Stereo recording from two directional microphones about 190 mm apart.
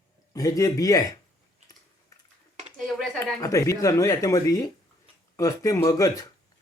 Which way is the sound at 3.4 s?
15° left (ahead or behind).